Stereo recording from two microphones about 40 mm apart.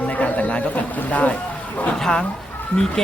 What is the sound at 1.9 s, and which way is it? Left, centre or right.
Speech, centre.